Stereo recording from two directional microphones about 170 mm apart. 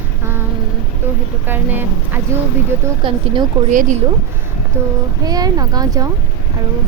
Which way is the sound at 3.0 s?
30° right (ahead or behind).